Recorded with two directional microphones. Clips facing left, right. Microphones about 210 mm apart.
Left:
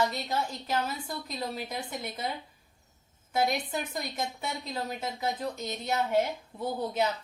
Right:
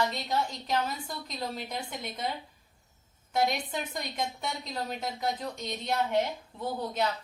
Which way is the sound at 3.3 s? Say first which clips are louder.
Even; 5° left (ahead or behind).